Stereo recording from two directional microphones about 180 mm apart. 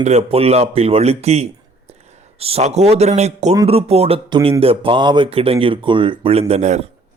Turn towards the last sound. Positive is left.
turn(degrees=-40)  # may be behind; listen again after turning